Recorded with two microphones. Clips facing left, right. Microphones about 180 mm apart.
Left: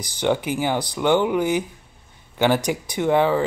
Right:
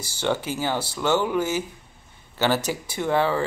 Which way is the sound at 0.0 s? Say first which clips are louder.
Left 4 dB; 15° left (ahead or behind).